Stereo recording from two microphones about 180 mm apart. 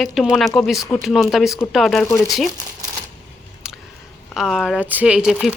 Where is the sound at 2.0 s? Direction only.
15° left (ahead or behind).